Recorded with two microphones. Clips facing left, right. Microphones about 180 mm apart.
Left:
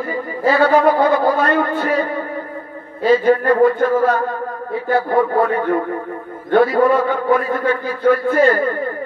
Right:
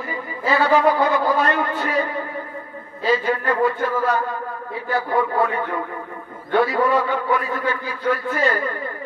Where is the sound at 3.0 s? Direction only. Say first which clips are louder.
Left 7 dB; 50° left (ahead or behind).